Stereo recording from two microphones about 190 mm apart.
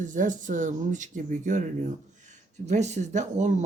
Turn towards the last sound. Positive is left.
turn(degrees=-40)  # may be behind; listen again after turning